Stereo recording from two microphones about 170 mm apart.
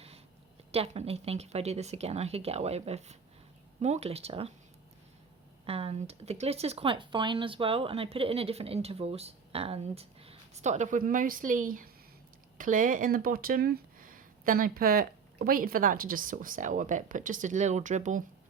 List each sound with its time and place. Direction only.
0.7 s speech: 35° right (ahead or behind)
5.6 s speech: 35° right (ahead or behind)